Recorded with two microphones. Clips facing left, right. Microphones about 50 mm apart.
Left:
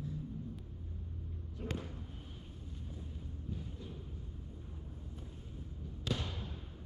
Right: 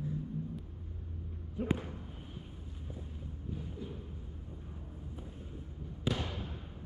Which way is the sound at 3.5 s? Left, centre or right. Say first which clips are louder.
Right 6 dB; centre.